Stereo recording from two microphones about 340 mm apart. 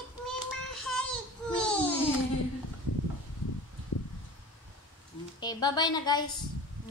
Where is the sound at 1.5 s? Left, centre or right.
Centre.